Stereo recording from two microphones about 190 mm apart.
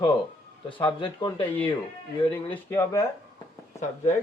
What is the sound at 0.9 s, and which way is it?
Speech, 25° left (ahead or behind).